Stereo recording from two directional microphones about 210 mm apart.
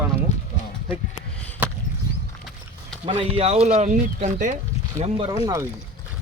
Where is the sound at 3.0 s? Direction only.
25° right (ahead or behind).